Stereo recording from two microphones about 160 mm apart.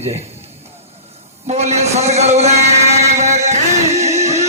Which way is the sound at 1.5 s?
45° right (ahead or behind).